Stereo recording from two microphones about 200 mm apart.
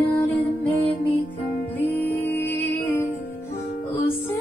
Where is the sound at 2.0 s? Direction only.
10° left (ahead or behind).